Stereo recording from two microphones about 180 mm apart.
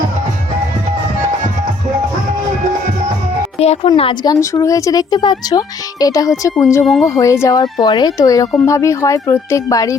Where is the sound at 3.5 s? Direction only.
35° left (ahead or behind).